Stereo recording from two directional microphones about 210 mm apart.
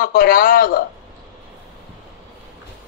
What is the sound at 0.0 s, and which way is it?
Speech, 40° left (ahead or behind).